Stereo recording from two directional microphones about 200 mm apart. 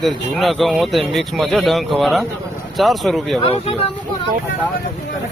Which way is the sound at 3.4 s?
30° left (ahead or behind).